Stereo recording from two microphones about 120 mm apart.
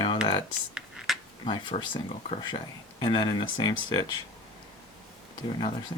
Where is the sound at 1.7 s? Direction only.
65° left (ahead or behind).